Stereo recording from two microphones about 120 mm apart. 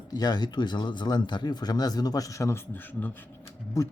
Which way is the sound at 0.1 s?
35° left (ahead or behind).